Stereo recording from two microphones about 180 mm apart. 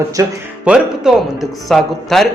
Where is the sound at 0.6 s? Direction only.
5° right (ahead or behind).